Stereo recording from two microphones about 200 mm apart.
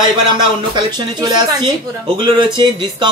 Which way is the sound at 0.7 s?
20° right (ahead or behind).